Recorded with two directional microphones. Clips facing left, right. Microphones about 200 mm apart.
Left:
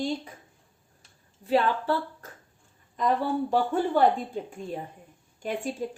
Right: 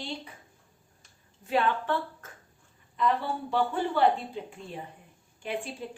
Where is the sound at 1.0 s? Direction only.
35° left (ahead or behind).